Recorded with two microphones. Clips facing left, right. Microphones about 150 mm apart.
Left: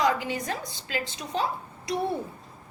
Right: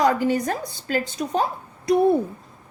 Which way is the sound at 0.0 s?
45° right (ahead or behind).